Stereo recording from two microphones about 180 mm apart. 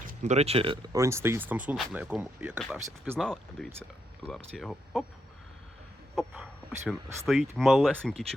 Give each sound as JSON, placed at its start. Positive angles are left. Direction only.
{"t": 0.0, "sound": "speech", "side_deg": -45}
{"t": 0.9, "sound": "speech", "side_deg": -15}
{"t": 6.1, "sound": "speech", "side_deg": 0}